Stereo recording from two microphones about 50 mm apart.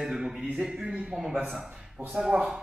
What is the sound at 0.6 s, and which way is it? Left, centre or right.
Speech, centre.